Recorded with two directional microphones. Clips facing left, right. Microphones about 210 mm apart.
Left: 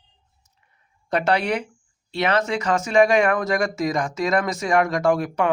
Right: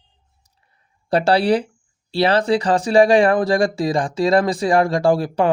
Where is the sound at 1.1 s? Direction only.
30° right (ahead or behind).